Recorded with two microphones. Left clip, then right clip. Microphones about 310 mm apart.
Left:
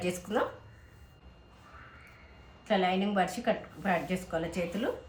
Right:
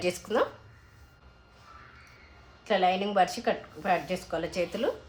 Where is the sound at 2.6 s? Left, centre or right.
Centre.